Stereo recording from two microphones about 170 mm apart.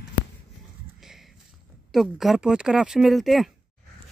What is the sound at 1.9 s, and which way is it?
Speech, centre (ahead or behind).